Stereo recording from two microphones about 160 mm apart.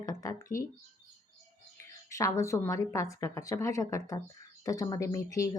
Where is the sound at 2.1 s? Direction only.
20° left (ahead or behind).